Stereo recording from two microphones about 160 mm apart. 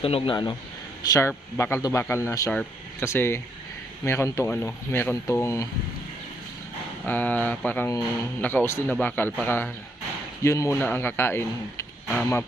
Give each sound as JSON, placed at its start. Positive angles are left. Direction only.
{"t": 0.0, "sound": "speech", "side_deg": 35}
{"t": 2.5, "sound": "speech", "side_deg": 5}
{"t": 7.0, "sound": "speech", "side_deg": 10}